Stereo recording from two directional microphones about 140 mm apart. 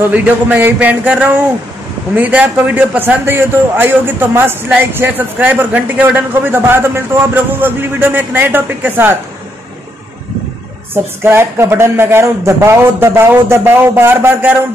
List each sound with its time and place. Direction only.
0.1 s a man's voice: 10° right (ahead or behind)
11.2 s a man's voice: 15° right (ahead or behind)